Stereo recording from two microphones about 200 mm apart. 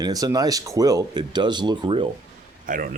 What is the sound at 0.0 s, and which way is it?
Speech, 20° right (ahead or behind).